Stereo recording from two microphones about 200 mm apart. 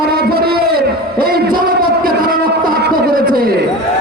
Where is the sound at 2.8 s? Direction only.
45° right (ahead or behind).